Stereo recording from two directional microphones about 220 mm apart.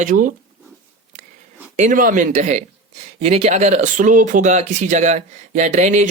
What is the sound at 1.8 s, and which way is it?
Speech, 35° right (ahead or behind).